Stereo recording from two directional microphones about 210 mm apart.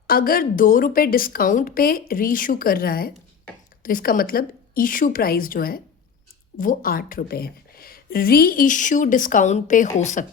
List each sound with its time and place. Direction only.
0.1 s a woman's voice: 45° left (ahead or behind)